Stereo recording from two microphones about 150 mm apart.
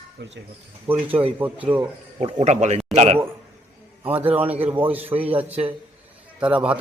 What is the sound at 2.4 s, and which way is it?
Speech, 50° right (ahead or behind).